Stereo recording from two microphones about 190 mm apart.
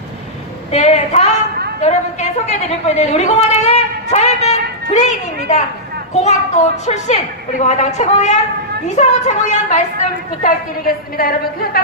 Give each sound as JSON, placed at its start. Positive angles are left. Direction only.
{"t": 0.7, "sound": "a woman's voice", "side_deg": 35}
{"t": 10.4, "sound": "a woman's voice", "side_deg": 50}